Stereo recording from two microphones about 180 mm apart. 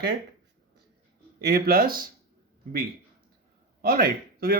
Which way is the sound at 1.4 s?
60° right (ahead or behind).